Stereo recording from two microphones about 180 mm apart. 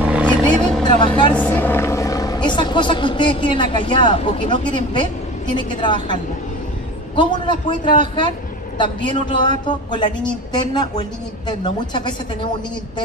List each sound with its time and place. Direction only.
0.0 s roaring cats: 10° right (ahead or behind)
0.8 s vehicle: 25° left (ahead or behind)
1.3 s a man's voice: 10° left (ahead or behind); by 5.9 s 25° left (ahead or behind)
7.2 s a man's voice: 25° left (ahead or behind)